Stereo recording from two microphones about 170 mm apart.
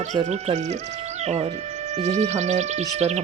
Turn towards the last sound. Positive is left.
turn(degrees=-40)  # may be behind; listen again after turning